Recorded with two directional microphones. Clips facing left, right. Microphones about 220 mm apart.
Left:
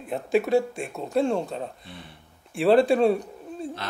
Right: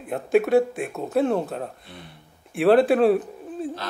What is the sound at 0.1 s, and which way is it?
Speech, centre (ahead or behind).